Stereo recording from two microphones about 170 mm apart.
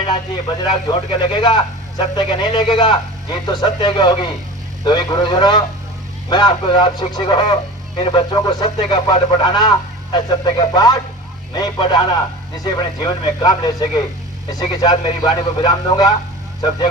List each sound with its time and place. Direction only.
0.6 s speech: 30° left (ahead or behind)